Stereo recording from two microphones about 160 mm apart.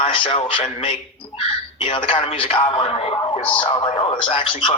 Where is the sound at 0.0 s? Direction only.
35° left (ahead or behind).